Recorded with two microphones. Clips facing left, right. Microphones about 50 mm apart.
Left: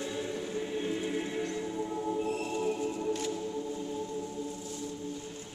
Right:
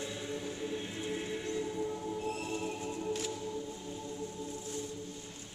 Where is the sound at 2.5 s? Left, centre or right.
Centre.